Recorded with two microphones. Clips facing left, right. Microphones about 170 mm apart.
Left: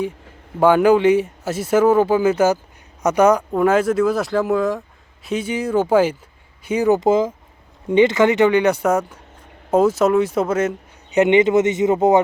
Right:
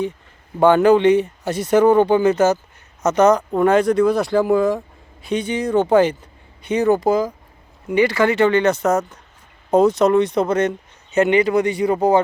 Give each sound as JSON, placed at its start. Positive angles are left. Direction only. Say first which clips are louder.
{"t": 0.6, "sound": "speech", "louder": "right 1 dB", "side_deg": 10}
{"t": 6.9, "sound": "speech", "louder": "left 1 dB", "side_deg": 20}
{"t": 11.1, "sound": "speech", "louder": "left 2 dB", "side_deg": 20}